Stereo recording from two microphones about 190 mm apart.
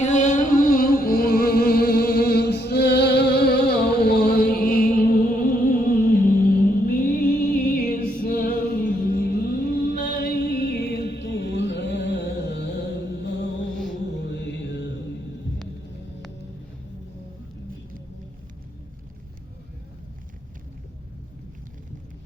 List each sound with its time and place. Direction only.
0.0 s music: 40° left (ahead or behind); by 13.5 s 65° left (ahead or behind)
14.2 s mantra: 65° left (ahead or behind)